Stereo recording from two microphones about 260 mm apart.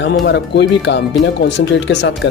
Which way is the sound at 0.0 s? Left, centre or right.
Left.